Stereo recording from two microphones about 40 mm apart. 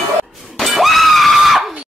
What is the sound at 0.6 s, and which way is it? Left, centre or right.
Screaming, centre.